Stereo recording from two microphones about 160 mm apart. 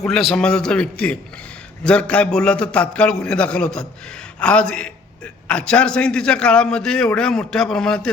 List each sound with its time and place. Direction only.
0.0 s a man's voice: centre (ahead or behind)